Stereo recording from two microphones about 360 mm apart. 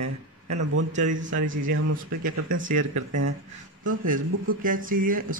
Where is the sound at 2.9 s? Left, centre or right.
Right.